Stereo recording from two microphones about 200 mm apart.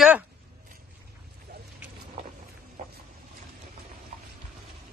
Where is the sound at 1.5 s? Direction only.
50° right (ahead or behind).